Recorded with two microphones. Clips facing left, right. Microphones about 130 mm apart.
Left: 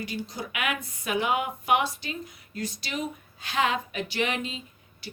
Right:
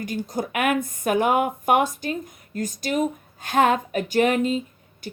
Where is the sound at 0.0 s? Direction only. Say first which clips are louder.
Right 7 dB; 45° right (ahead or behind).